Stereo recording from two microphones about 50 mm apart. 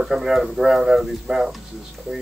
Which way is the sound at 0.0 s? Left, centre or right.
Centre.